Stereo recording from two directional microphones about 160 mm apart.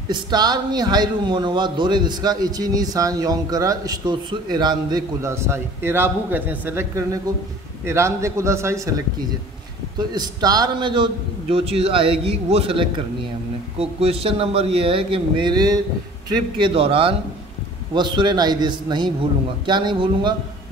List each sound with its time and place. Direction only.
0.1 s a man's voice: 25° right (ahead or behind)
9.9 s a man's voice: 25° right (ahead or behind)